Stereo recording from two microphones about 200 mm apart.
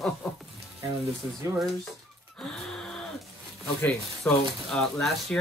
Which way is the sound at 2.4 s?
Centre (ahead or behind).